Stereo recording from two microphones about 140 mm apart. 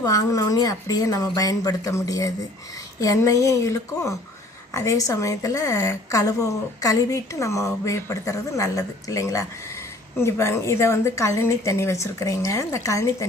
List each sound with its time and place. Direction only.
0.0 s a woman's voice: 25° left (ahead or behind)